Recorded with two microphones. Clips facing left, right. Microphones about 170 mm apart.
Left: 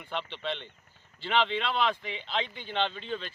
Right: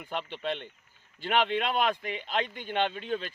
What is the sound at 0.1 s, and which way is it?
Speech, 45° right (ahead or behind).